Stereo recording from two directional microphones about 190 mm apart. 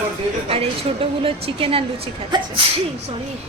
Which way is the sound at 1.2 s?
30° right (ahead or behind).